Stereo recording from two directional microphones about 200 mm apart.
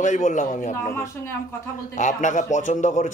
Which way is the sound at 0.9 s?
10° left (ahead or behind).